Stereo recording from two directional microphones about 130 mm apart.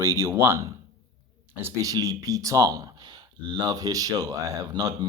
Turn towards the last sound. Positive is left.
turn(degrees=-30)  # may be behind; listen again after turning